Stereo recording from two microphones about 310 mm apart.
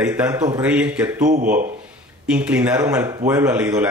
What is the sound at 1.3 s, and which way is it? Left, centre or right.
Speech, right.